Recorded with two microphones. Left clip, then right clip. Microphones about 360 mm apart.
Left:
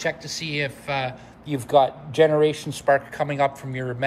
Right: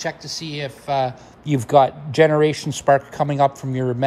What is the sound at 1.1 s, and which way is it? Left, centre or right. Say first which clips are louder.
Speech: right 6 dB; right.